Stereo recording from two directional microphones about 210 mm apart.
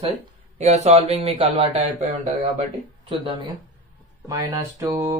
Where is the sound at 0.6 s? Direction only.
30° right (ahead or behind).